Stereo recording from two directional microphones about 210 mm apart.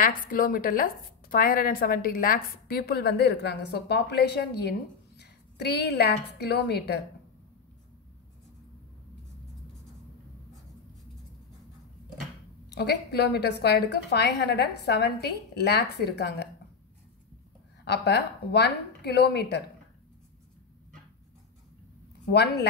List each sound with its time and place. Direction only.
0.0 s a woman's voice: 40° left (ahead or behind)
12.6 s a woman's voice: 50° left (ahead or behind)
17.8 s a woman's voice: 55° left (ahead or behind)
22.2 s a woman's voice: 50° left (ahead or behind)